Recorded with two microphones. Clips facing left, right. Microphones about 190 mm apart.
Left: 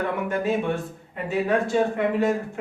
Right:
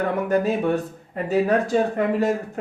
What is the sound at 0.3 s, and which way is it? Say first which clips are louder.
Speech: right 5 dB; 40° right (ahead or behind).